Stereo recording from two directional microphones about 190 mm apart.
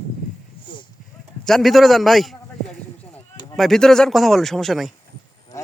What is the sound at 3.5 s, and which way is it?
Speech, centre (ahead or behind).